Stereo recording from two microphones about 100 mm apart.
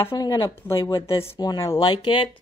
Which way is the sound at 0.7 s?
30° left (ahead or behind).